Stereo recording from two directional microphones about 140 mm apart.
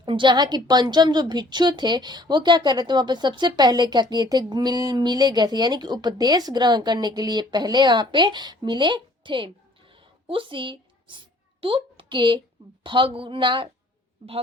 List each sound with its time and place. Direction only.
0.0 s a woman's voice: 35° right (ahead or behind)